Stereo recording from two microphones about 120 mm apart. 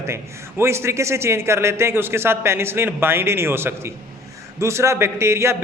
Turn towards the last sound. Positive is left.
turn(degrees=-20)  # may be behind; listen again after turning